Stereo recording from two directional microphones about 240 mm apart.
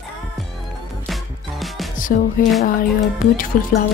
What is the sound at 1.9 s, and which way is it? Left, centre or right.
Music, left.